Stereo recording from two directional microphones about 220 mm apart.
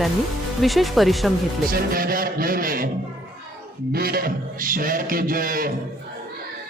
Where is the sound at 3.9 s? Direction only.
45° right (ahead or behind).